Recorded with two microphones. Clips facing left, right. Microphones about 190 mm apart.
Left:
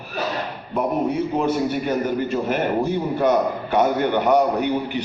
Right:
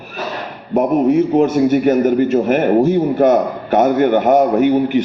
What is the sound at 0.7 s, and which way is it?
A man's voice, 45° right (ahead or behind).